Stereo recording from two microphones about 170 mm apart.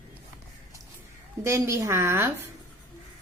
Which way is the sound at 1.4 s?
15° right (ahead or behind).